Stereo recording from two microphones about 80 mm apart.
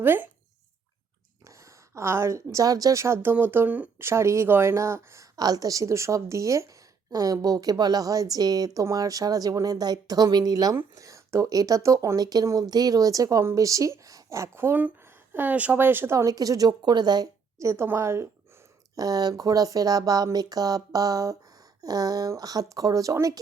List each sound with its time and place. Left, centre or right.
0.0 s speech: right
2.0 s a woman's voice: right
4.0 s a woman's voice: right
5.4 s a woman's voice: right
16.1 s speech: right
17.6 s a woman's voice: right
18.9 s a woman's voice: right